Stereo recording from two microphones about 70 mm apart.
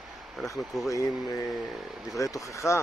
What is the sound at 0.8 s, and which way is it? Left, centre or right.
Speech, left.